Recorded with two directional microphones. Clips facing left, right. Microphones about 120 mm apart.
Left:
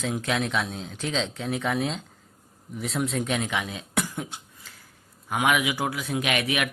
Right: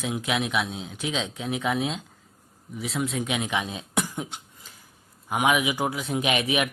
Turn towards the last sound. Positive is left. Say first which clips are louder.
# right 2 dB
turn(degrees=-20)  # may be behind; listen again after turning